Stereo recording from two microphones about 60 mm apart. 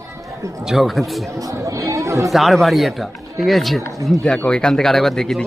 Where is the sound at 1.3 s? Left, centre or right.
Right.